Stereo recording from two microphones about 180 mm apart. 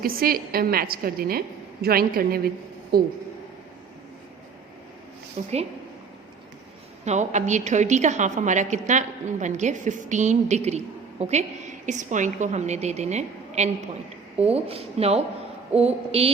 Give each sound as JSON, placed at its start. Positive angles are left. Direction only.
{"t": 0.0, "sound": "a woman's voice", "side_deg": -55}
{"t": 5.4, "sound": "a woman's voice", "side_deg": -40}
{"t": 7.0, "sound": "a woman's voice", "side_deg": -40}